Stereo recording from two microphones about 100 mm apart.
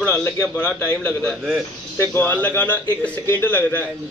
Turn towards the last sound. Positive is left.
turn(degrees=20)  # may be behind; listen again after turning